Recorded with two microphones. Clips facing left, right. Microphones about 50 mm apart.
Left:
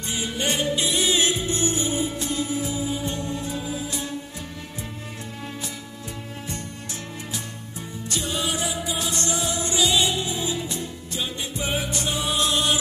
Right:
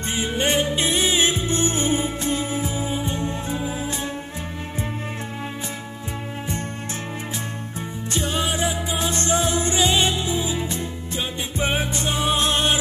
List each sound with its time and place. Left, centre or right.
0.1 s music: right
8.1 s music: right